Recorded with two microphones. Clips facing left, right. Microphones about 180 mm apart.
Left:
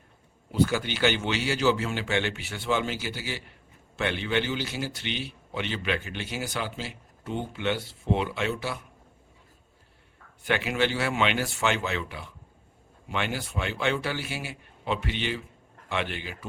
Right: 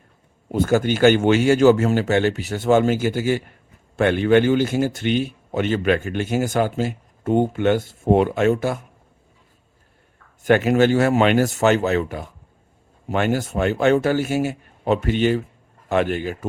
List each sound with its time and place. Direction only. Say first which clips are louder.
0.4 s a man's voice: right 7 dB; 50° right (ahead or behind)
10.4 s a man's voice: right 11 dB; 45° right (ahead or behind)